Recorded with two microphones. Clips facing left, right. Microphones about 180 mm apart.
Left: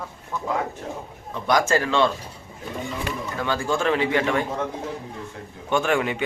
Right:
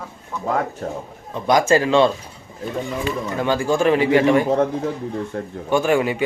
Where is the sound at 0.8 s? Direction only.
45° right (ahead or behind).